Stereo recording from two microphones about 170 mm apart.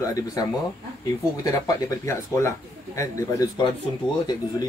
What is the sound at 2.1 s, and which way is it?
Speech, 15° left (ahead or behind).